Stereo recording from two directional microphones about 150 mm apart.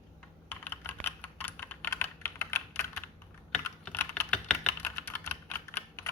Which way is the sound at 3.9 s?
15° left (ahead or behind).